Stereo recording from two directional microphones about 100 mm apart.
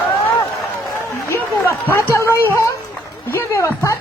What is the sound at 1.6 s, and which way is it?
A woman's voice, 30° left (ahead or behind).